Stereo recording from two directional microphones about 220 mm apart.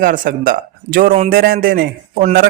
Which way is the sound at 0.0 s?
40° right (ahead or behind).